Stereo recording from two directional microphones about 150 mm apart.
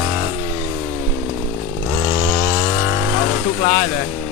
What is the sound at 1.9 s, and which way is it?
Chainsaw, 15° right (ahead or behind).